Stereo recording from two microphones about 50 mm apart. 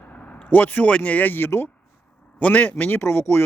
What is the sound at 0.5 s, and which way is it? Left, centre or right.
Speech, left.